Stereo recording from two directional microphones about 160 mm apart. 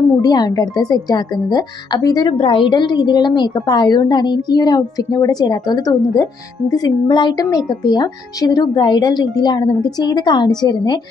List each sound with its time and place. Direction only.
0.2 s speech: 25° left (ahead or behind)